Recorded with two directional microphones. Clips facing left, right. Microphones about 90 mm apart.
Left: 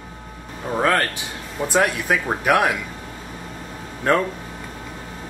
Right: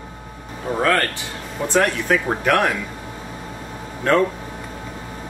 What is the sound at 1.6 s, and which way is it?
Speech, 10° left (ahead or behind).